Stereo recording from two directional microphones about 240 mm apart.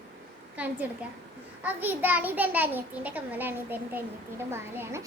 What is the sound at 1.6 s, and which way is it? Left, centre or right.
A child's voice, centre.